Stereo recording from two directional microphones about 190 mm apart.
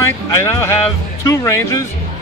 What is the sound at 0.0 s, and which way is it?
A man's voice, 15° left (ahead or behind).